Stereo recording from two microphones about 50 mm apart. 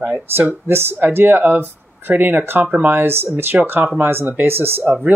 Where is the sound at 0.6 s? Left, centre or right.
Right.